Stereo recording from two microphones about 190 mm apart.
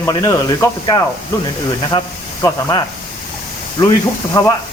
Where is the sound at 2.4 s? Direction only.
20° left (ahead or behind).